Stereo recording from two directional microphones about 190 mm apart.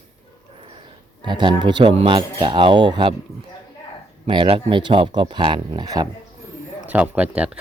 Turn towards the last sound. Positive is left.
turn(degrees=-5)  # may be behind; listen again after turning